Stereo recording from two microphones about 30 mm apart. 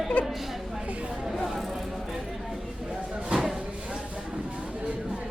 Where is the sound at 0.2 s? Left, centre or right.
Left.